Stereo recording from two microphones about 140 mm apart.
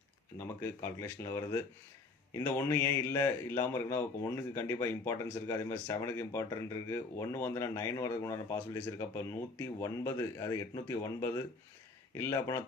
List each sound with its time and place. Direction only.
0.3 s speech: 20° left (ahead or behind)